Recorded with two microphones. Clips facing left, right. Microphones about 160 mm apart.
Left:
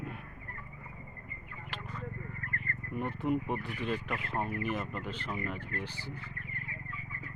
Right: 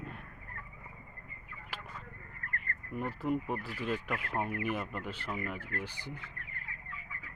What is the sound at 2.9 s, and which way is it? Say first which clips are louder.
Speech: left 2 dB; centre (ahead or behind).